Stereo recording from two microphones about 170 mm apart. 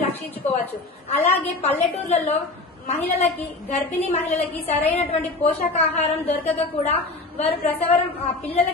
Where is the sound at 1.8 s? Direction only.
40° left (ahead or behind).